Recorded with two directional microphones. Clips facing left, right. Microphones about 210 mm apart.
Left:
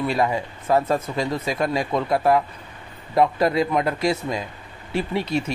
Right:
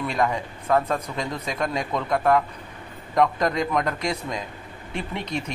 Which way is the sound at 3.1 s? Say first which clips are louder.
Left 3 dB; 5° left (ahead or behind).